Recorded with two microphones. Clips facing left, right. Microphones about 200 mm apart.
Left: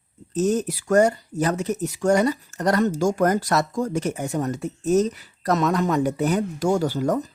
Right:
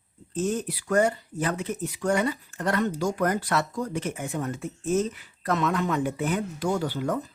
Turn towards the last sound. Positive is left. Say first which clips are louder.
# left 5 dB
turn(degrees=40)  # may be behind; listen again after turning